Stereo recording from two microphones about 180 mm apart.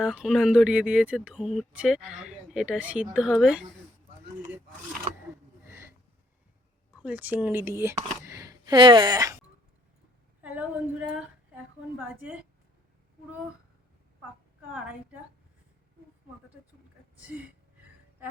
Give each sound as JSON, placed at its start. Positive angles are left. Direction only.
{"t": 0.0, "sound": "speech", "side_deg": -5}
{"t": 5.6, "sound": "a sound", "side_deg": -15}
{"t": 7.0, "sound": "a woman's voice", "side_deg": -10}
{"t": 10.4, "sound": "a woman's voice", "side_deg": -10}
{"t": 14.7, "sound": "a woman's voice", "side_deg": -10}
{"t": 17.2, "sound": "a woman's voice", "side_deg": -5}